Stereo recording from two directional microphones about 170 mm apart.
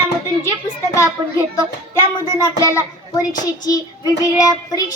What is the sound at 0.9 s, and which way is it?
A child's voice, 20° left (ahead or behind).